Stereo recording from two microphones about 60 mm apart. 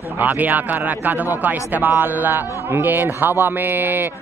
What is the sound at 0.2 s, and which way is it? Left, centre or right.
A man's voice, right.